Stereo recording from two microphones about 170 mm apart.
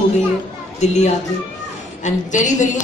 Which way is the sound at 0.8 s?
40° left (ahead or behind).